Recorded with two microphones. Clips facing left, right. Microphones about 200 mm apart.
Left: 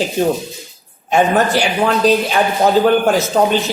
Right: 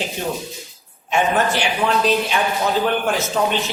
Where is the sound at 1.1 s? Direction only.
35° left (ahead or behind).